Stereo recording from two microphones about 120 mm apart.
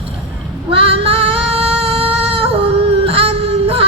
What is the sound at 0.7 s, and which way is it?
Female singing, 50° right (ahead or behind).